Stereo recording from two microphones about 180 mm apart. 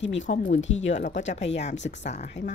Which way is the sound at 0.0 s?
90° left.